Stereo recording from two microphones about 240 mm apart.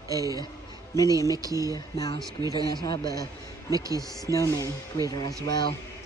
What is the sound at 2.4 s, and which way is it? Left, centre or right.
Speech, centre.